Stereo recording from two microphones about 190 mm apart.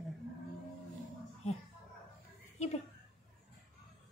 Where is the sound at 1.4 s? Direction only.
35° left (ahead or behind).